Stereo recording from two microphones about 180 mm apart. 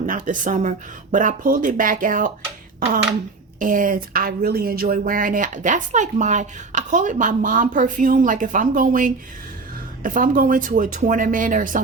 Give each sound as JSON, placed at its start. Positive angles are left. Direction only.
{"t": 0.0, "sound": "speech", "side_deg": -45}
{"t": 3.6, "sound": "speech", "side_deg": -45}